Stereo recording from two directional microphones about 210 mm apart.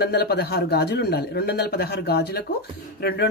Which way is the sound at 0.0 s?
50° left (ahead or behind).